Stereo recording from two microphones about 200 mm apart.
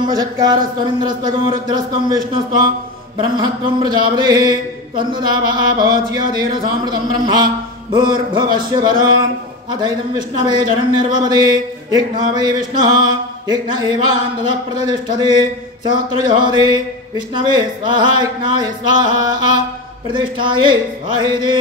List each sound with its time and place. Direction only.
0.0 s speech: 20° right (ahead or behind)
10.4 s speech: 20° right (ahead or behind)